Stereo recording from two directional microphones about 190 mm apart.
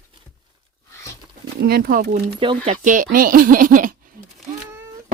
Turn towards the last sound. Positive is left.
turn(degrees=-45)  # may be behind; listen again after turning